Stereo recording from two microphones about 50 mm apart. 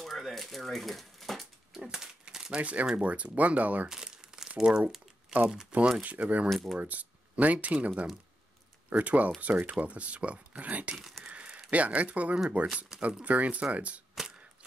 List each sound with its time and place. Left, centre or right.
0.0 s a sound: centre
1.8 s speech: centre
2.5 s speech: right
3.9 s crumpling: centre
5.3 s speech: right
6.0 s speech: right
6.5 s speech: centre
6.8 s speech: right
11.0 s speech: centre
11.2 s a sound: right
12.6 s speech: right